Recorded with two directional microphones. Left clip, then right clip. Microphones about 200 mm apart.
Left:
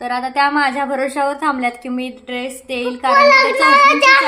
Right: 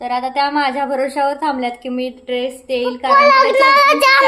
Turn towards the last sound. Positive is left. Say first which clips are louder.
# left 1 dB
turn(degrees=-45)  # may be behind; listen again after turning